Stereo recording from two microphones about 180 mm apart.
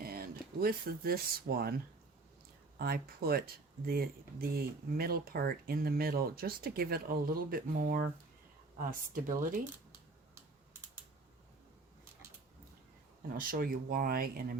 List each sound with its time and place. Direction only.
0.0 s speech: 55° right (ahead or behind)
2.7 s speech: 60° right (ahead or behind)
13.3 s speech: 50° right (ahead or behind)